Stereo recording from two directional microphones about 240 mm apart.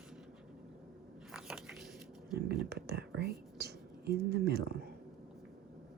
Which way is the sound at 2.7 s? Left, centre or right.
Right.